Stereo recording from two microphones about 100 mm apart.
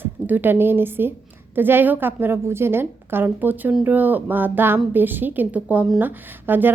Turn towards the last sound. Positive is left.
turn(degrees=-20)  # may be behind; listen again after turning